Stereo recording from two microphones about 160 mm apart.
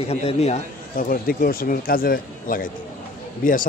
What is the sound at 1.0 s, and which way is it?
Speech, 65° left (ahead or behind).